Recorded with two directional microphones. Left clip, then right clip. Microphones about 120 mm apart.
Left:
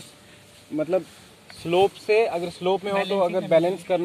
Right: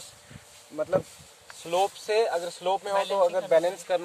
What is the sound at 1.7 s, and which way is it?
Speech, 30° right (ahead or behind).